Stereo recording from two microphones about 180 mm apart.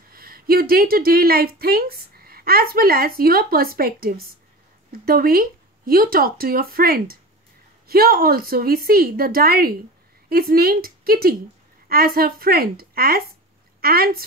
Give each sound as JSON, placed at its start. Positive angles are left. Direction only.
{"t": 0.1, "sound": "a woman's voice", "side_deg": -55}